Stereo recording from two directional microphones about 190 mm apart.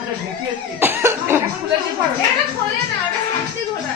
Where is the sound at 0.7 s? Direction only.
10° right (ahead or behind).